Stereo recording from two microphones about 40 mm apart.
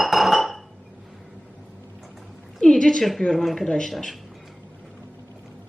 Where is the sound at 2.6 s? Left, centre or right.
Centre.